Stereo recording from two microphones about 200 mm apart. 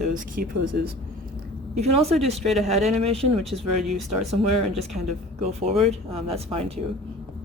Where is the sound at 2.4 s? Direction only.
Centre (ahead or behind).